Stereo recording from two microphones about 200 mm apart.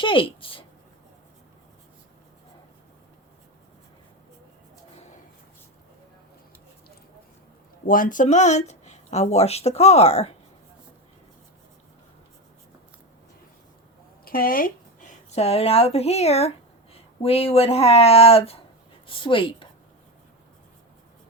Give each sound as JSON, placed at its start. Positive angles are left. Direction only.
{"t": 0.0, "sound": "speech", "side_deg": 25}
{"t": 7.9, "sound": "speech", "side_deg": 45}
{"t": 14.3, "sound": "a woman's voice", "side_deg": 45}